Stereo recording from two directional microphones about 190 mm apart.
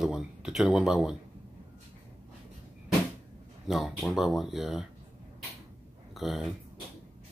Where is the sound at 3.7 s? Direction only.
Centre (ahead or behind).